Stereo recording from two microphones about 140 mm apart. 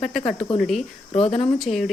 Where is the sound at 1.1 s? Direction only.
50° left (ahead or behind).